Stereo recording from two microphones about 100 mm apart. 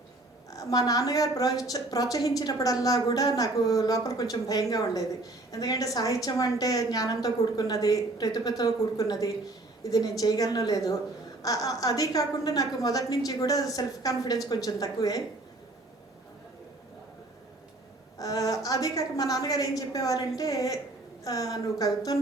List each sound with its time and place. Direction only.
0.5 s a woman's voice: 40° left (ahead or behind)
18.2 s a woman's voice: 35° left (ahead or behind)